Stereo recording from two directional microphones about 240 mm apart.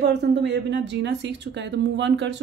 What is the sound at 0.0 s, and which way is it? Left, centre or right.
A woman's voice, right.